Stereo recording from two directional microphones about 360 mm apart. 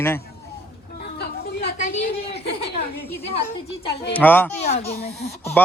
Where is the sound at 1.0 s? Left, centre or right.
Left.